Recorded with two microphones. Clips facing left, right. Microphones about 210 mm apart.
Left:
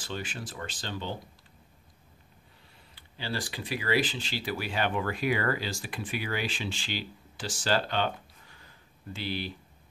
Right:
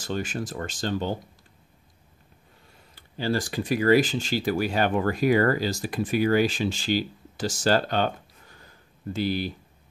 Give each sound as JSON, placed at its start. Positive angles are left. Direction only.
{"t": 0.0, "sound": "speech", "side_deg": -45}
{"t": 2.9, "sound": "speech", "side_deg": -45}